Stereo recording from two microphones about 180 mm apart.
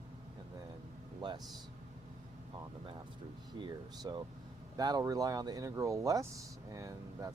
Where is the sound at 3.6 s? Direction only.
25° right (ahead or behind).